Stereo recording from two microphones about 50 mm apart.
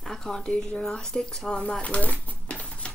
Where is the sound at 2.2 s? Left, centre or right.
Left.